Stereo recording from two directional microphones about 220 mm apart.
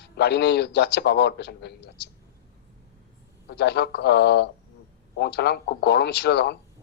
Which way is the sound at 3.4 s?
50° left (ahead or behind).